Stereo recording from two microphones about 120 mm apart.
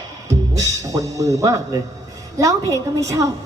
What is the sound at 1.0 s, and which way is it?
A woman's voice, 25° right (ahead or behind).